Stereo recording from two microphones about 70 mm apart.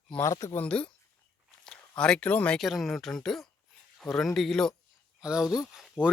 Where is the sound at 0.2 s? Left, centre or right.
Left.